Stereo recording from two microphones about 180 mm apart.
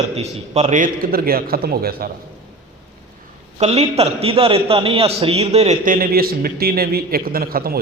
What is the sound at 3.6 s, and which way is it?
A man's voice, 35° right (ahead or behind).